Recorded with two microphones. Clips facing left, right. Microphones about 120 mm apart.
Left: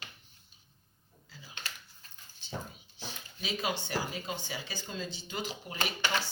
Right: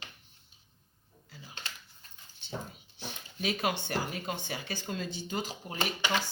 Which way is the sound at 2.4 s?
60° right (ahead or behind).